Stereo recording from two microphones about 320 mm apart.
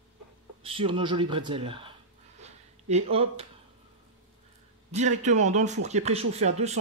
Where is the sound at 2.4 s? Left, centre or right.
Centre.